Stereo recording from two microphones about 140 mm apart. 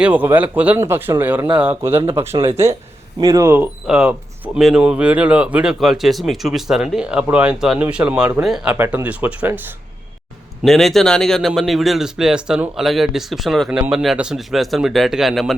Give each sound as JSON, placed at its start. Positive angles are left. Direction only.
{"t": 0.0, "sound": "speech", "side_deg": -10}
{"t": 2.3, "sound": "speech", "side_deg": -40}
{"t": 3.2, "sound": "speech", "side_deg": -25}
{"t": 3.8, "sound": "speech", "side_deg": -5}
{"t": 8.7, "sound": "speech", "side_deg": -15}
{"t": 10.6, "sound": "speech", "side_deg": 0}